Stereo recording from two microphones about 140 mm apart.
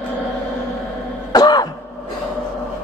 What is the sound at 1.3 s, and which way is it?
Throat clearing, 30° left (ahead or behind).